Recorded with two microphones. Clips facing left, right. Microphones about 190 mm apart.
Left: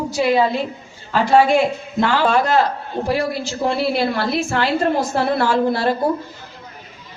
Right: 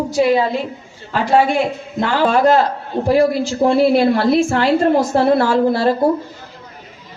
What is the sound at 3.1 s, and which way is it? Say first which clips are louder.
A woman's voice: right 8 dB; 45° right (ahead or behind).